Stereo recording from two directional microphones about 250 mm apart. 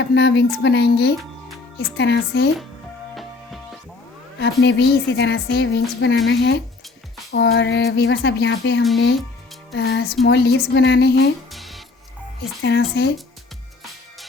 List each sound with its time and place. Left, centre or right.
0.0 s speech: left
4.4 s a woman's voice: left
11.5 s music: centre
12.6 s a woman's voice: left